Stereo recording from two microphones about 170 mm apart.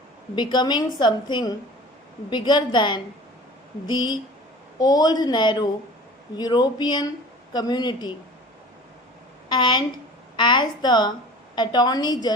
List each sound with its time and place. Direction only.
0.3 s a woman's voice: 25° left (ahead or behind)
9.5 s a woman's voice: 25° left (ahead or behind)